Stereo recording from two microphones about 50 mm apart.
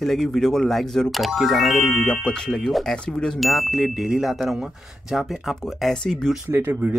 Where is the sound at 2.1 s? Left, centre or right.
Centre.